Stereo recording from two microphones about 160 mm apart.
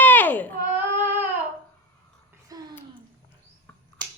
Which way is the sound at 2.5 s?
25° right (ahead or behind).